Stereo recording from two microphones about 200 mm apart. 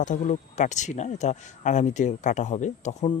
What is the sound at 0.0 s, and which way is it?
Speech, 40° left (ahead or behind).